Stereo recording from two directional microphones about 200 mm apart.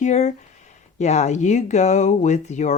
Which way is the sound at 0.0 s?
35° left (ahead or behind).